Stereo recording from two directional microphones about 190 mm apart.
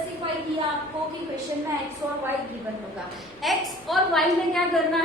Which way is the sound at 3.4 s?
Centre (ahead or behind).